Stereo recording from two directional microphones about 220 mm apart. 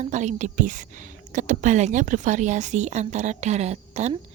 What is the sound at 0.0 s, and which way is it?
A woman's voice, 35° right (ahead or behind).